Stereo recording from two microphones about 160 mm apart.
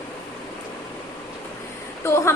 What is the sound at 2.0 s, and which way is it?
Speech, 15° left (ahead or behind).